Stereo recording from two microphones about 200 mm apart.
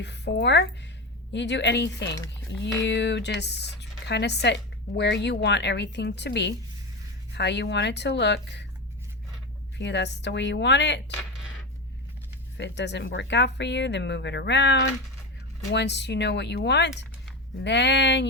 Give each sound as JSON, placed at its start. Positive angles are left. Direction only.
{"t": 0.0, "sound": "speech", "side_deg": 60}
{"t": 9.7, "sound": "speech", "side_deg": 60}
{"t": 12.5, "sound": "speech", "side_deg": 60}